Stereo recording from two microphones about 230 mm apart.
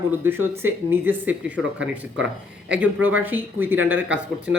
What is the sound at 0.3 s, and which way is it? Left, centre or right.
Speech, centre.